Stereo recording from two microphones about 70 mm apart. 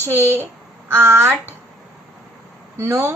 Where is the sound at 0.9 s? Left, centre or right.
Right.